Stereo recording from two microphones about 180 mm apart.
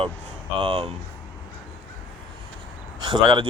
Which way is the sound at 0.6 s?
30° right (ahead or behind).